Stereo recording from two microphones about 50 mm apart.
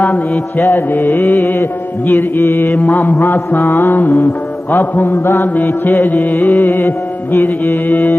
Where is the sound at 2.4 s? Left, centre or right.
Left.